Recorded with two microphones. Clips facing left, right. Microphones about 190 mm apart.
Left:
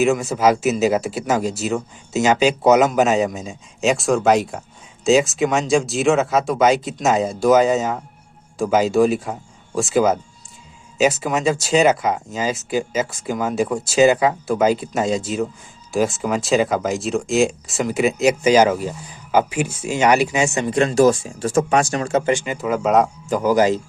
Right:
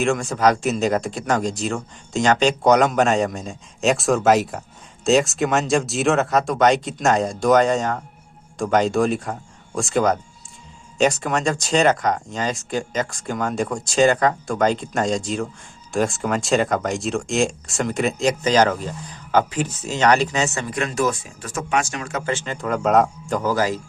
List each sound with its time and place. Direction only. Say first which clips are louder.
0.0 s speech: left 2 dB; 5° left (ahead or behind)
20.7 s speech: left 9 dB; 30° left (ahead or behind)
22.3 s speech: left 4 dB; 10° left (ahead or behind)
23.4 s speech: left 6 dB; 15° left (ahead or behind)